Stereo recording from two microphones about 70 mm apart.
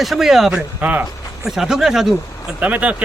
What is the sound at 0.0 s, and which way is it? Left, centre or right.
Speech, centre.